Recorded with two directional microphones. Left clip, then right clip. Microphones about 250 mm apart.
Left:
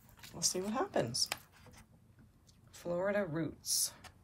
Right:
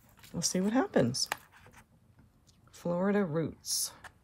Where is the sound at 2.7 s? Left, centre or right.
Right.